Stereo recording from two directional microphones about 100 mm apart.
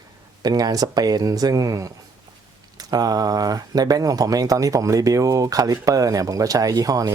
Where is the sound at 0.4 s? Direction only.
40° right (ahead or behind).